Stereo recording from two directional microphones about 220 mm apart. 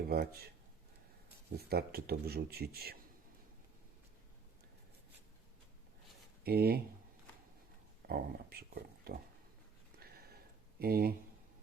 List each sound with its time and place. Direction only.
0.1 s speech: 45° right (ahead or behind)
1.5 s speech: 45° right (ahead or behind)
6.4 s speech: 45° right (ahead or behind)
8.0 s speech: 45° right (ahead or behind)
10.0 s a sound: 45° right (ahead or behind)